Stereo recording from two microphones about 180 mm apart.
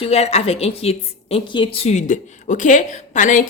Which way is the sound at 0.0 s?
35° left (ahead or behind).